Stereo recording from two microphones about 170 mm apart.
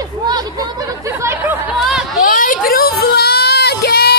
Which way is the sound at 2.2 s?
55° left (ahead or behind).